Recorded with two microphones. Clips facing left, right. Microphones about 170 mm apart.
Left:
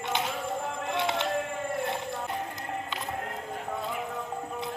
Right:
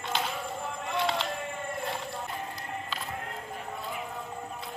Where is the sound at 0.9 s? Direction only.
20° left (ahead or behind).